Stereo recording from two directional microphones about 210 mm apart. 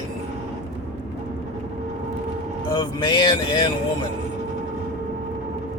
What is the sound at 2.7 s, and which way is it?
Speech, 20° left (ahead or behind).